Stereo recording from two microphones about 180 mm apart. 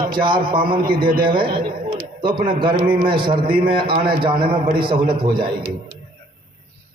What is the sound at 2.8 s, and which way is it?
Speech, 55° right (ahead or behind).